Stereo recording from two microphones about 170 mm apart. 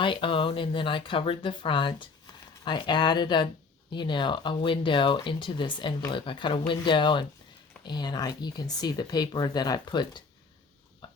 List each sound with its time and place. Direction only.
0.0 s speech: 30° left (ahead or behind)